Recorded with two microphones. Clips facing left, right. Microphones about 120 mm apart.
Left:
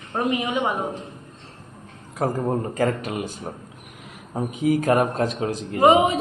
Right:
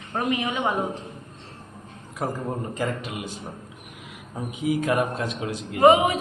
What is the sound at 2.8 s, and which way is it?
Speech, 45° left (ahead or behind).